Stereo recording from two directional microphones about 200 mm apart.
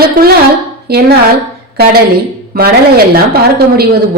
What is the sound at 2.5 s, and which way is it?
A woman's voice, 50° right (ahead or behind).